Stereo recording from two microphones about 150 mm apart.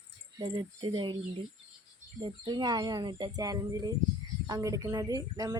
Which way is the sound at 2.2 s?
30° right (ahead or behind).